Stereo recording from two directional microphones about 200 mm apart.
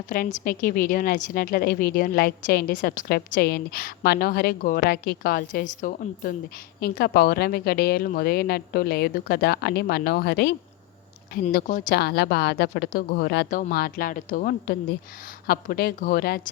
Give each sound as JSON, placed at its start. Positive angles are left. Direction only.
{"t": 0.1, "sound": "a woman's voice", "side_deg": 40}
{"t": 11.5, "sound": "a woman's voice", "side_deg": 50}